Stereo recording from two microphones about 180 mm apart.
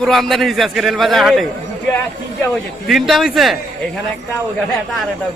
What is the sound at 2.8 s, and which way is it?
Speech, centre (ahead or behind).